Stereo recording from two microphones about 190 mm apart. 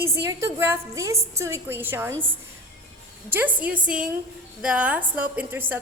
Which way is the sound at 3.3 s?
10° right (ahead or behind).